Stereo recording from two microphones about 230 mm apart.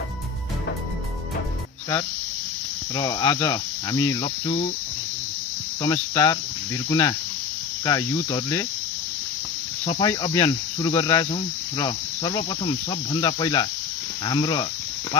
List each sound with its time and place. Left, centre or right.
3.0 s cricket: centre
5.8 s cricket: centre
9.8 s cricket: centre